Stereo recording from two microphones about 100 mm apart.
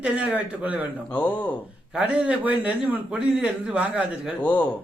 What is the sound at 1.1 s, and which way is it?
Speech, 15° left (ahead or behind).